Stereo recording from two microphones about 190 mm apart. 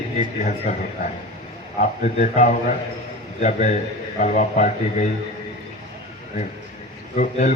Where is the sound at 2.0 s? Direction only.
40° left (ahead or behind).